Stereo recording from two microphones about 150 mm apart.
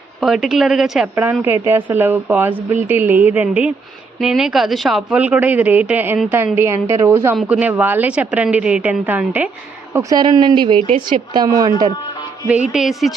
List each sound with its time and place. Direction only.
0.2 s a woman's voice: centre (ahead or behind)
1.1 s a woman's voice: 15° right (ahead or behind)
9.9 s speech: 20° right (ahead or behind)
10.8 s speech: 60° right (ahead or behind)
11.3 s a woman's voice: 25° right (ahead or behind)
12.5 s a woman's voice: 10° right (ahead or behind)